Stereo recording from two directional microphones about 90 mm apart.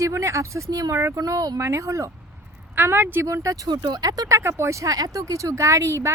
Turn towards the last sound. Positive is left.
turn(degrees=-35)  # may be behind; listen again after turning